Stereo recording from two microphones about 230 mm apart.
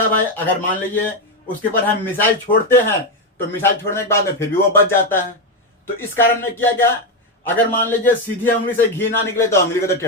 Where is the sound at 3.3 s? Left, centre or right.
Centre.